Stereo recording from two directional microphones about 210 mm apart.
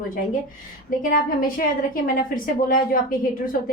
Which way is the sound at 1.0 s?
40° left (ahead or behind).